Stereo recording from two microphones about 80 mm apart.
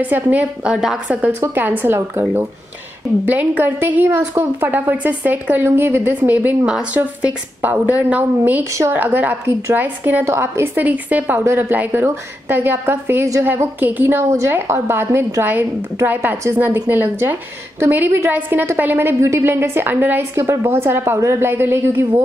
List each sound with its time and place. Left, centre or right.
0.0 s a woman's voice: right
0.7 s a woman's voice: centre
1.4 s a woman's voice: right
10.8 s a woman's voice: centre